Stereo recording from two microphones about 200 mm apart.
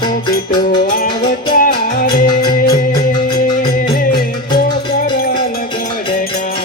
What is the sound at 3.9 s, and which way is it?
Music, 50° left (ahead or behind).